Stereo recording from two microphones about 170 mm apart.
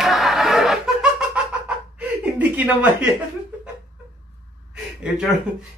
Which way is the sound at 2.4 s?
5° right (ahead or behind).